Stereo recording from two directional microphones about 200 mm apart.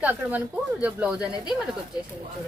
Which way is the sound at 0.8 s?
5° right (ahead or behind).